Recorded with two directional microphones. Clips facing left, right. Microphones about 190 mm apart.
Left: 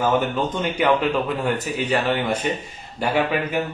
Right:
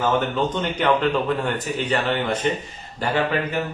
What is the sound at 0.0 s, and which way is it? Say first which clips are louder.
A man's voice: left 1 dB; 10° left (ahead or behind).